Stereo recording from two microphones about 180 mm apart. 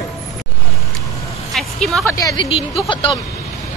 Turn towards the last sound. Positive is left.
turn(degrees=25)  # may be behind; listen again after turning